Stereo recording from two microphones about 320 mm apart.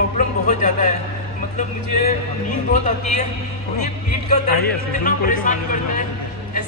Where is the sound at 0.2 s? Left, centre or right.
Left.